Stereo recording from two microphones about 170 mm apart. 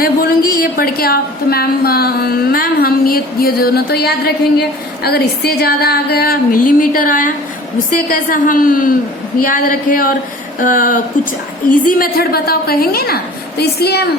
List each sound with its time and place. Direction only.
0.0 s a woman's voice: 55° left (ahead or behind)